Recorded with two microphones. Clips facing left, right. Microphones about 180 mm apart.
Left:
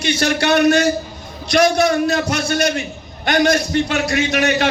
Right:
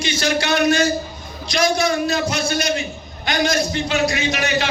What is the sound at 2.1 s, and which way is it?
A man's voice, 65° left (ahead or behind).